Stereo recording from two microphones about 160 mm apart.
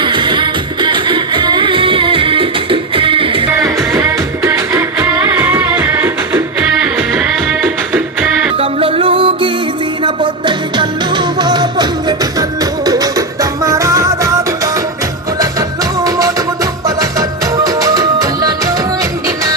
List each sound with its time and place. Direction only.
0.0 s music: 30° right (ahead or behind)
3.6 s music: 20° right (ahead or behind)
8.5 s music: 35° right (ahead or behind)
16.0 s music: 20° right (ahead or behind)